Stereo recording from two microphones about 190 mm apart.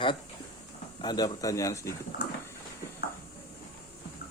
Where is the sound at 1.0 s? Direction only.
20° left (ahead or behind).